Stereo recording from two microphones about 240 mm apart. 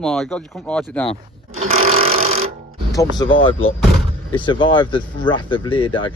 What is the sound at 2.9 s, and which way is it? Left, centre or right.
Speech, centre.